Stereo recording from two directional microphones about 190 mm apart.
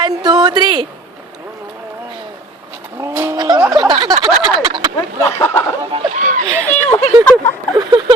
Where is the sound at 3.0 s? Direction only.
15° right (ahead or behind).